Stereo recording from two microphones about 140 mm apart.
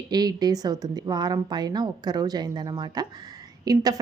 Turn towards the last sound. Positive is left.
turn(degrees=-25)  # may be behind; listen again after turning